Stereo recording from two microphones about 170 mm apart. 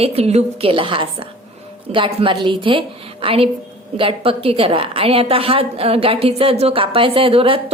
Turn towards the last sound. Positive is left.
turn(degrees=-35)  # may be behind; listen again after turning